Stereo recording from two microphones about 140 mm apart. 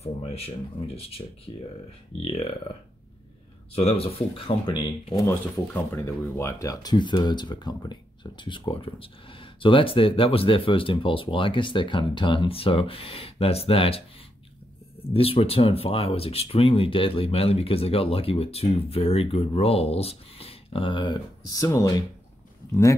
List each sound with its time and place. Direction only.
0.0 s speech: 45° left (ahead or behind)
3.7 s speech: 45° left (ahead or behind)
5.2 s speech: 15° left (ahead or behind); by 14.0 s 45° left (ahead or behind)
15.1 s speech: 45° left (ahead or behind); by 22.0 s 25° left (ahead or behind)